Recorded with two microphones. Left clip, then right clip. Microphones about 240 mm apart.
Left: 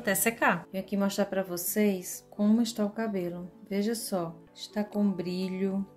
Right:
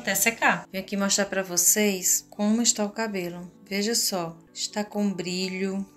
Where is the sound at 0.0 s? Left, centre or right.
Left.